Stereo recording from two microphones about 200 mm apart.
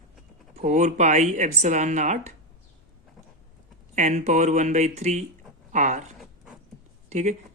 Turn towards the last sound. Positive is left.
turn(degrees=-35)  # may be behind; listen again after turning